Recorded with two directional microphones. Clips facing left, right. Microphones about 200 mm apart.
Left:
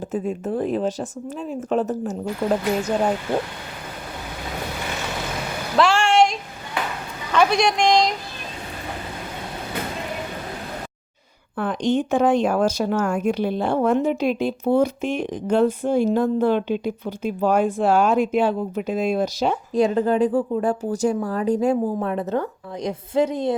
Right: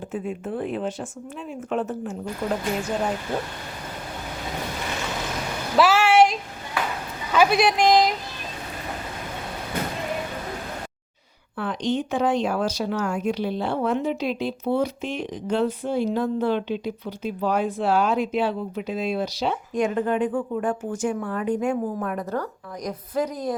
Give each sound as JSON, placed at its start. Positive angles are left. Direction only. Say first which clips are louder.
{"t": 0.1, "sound": "speech", "louder": "left 4 dB", "side_deg": 40}
{"t": 5.7, "sound": "a sound", "louder": "even", "side_deg": -5}
{"t": 7.3, "sound": "speech", "louder": "even", "side_deg": -5}
{"t": 11.5, "sound": "speech", "louder": "left 4 dB", "side_deg": 50}
{"t": 21.9, "sound": "a woman's voice", "louder": "left 4 dB", "side_deg": 25}